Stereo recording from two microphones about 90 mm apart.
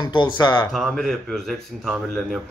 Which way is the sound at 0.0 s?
60° left (ahead or behind).